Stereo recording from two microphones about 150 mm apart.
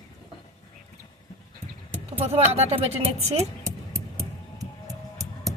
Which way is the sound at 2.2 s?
40° right (ahead or behind).